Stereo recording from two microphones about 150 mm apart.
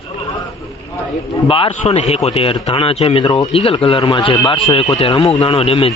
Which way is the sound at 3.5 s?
40° left (ahead or behind).